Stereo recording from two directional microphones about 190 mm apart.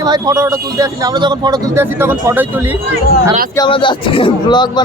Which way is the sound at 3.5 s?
25° left (ahead or behind).